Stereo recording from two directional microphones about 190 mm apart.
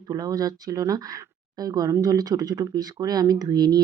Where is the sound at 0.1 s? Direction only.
20° right (ahead or behind).